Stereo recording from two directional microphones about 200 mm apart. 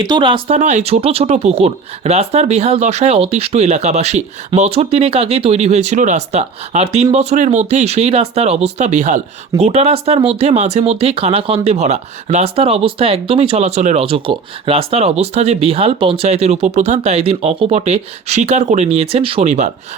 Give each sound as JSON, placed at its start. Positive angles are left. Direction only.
{"t": 0.0, "sound": "speech", "side_deg": -20}